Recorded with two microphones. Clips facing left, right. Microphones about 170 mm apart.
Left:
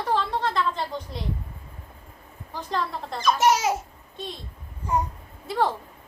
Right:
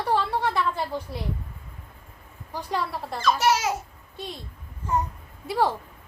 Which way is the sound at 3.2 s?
15° left (ahead or behind).